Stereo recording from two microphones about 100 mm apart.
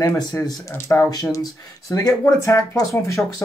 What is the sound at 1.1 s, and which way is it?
Speech, 40° left (ahead or behind).